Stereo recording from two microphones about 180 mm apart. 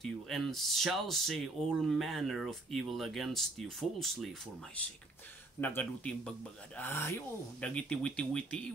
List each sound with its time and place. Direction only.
0.0 s speech: centre (ahead or behind)
5.6 s speech: 10° left (ahead or behind)